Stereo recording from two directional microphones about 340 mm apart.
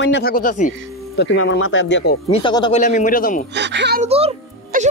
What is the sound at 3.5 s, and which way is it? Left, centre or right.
Speech, right.